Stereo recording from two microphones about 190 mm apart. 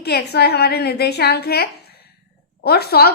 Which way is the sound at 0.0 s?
60° left (ahead or behind).